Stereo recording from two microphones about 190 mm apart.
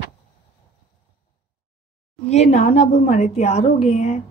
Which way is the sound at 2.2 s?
35° left (ahead or behind).